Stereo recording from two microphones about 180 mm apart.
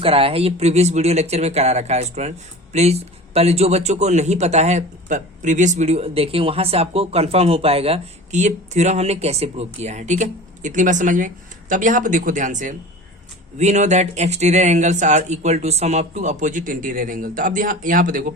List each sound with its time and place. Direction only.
0.0 s a man's voice: 30° right (ahead or behind); by 18.3 s 50° right (ahead or behind)